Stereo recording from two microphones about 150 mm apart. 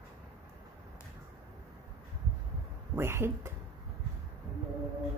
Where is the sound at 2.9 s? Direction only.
15° right (ahead or behind).